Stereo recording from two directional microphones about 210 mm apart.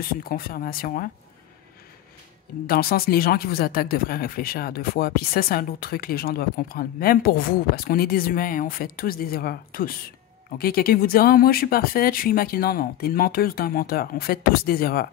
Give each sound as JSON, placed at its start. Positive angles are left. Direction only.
{"t": 0.1, "sound": "speech", "side_deg": 45}
{"t": 2.6, "sound": "speech", "side_deg": 45}